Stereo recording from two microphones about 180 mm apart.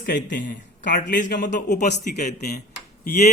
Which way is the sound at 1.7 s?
40° left (ahead or behind).